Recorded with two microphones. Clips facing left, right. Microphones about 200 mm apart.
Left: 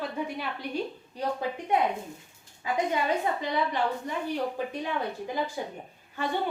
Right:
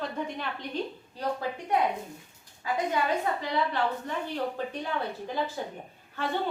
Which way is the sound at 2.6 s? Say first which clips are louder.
Left 1 dB; 20° left (ahead or behind).